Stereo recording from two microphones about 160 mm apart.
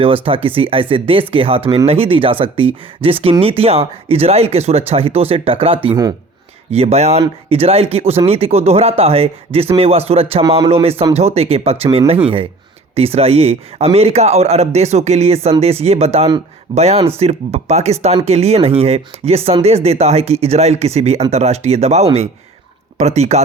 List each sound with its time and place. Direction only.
0.0 s speech: 35° right (ahead or behind)
6.7 s speech: 40° right (ahead or behind)